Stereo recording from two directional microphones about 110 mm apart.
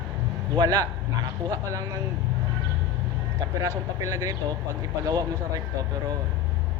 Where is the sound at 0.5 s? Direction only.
35° right (ahead or behind).